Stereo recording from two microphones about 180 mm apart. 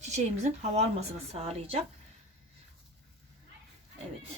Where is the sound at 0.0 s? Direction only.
40° right (ahead or behind).